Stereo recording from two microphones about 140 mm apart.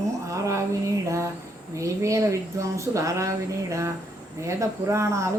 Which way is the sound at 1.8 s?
20° right (ahead or behind).